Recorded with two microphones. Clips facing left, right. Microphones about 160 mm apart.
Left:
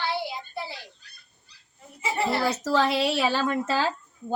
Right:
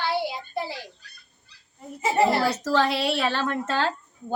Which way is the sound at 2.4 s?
5° left (ahead or behind).